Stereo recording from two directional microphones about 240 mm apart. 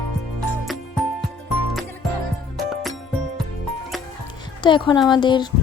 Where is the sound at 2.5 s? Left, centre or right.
Centre.